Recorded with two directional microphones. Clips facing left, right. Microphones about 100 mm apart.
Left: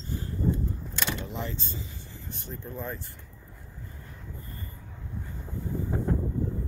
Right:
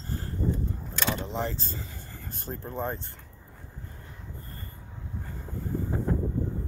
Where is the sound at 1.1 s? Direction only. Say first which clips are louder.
Right 6 dB; 35° right (ahead or behind).